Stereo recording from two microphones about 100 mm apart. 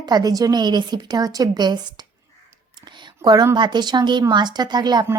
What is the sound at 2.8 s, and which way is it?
Whispering, 45° right (ahead or behind).